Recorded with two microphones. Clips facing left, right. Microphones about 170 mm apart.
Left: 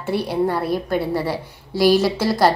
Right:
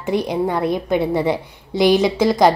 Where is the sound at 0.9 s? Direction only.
20° right (ahead or behind).